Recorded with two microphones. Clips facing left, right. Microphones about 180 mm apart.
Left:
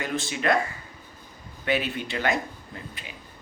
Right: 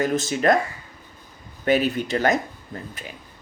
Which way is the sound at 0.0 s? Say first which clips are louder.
Right 7 dB; 40° right (ahead or behind).